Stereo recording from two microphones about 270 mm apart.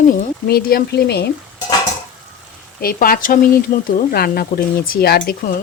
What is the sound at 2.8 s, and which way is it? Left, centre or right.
Speech, left.